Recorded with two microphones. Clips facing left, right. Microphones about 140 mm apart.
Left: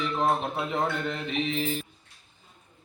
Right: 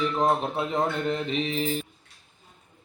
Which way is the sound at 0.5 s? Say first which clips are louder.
Right 2 dB; 35° right (ahead or behind).